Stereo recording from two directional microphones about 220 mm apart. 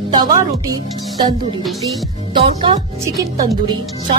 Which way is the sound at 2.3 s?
25° right (ahead or behind).